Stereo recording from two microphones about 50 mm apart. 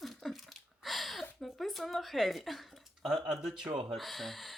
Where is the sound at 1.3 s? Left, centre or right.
Centre.